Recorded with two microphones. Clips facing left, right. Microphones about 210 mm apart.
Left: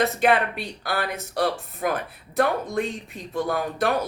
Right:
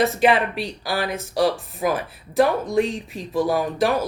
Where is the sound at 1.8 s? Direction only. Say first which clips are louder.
Right 3 dB; centre (ahead or behind).